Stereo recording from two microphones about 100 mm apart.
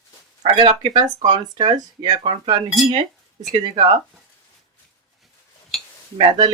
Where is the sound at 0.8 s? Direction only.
50° right (ahead or behind).